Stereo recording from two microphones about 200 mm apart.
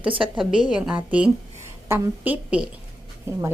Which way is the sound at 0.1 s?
25° right (ahead or behind).